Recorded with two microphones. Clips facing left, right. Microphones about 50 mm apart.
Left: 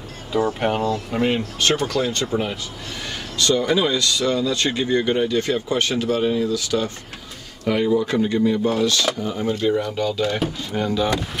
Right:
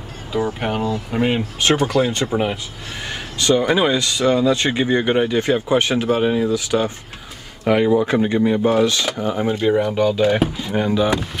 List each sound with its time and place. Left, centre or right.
0.6 s speech: centre